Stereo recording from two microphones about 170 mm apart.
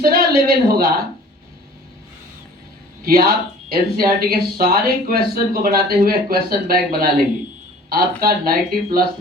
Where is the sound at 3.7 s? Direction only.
60° right (ahead or behind).